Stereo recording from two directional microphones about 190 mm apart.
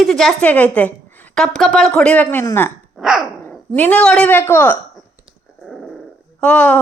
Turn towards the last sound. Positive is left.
turn(degrees=5)  # may be behind; listen again after turning